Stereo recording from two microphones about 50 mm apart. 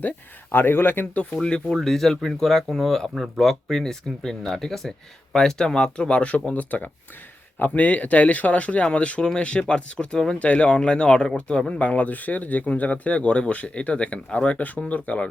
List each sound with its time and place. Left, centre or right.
0.5 s speech: left
1.4 s speech: centre